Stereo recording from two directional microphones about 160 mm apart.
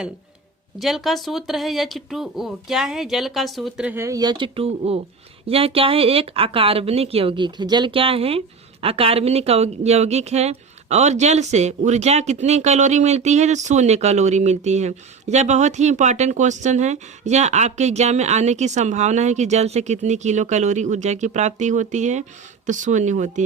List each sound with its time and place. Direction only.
0.8 s speech: centre (ahead or behind)
3.9 s speech: 20° right (ahead or behind); by 23.4 s 50° right (ahead or behind)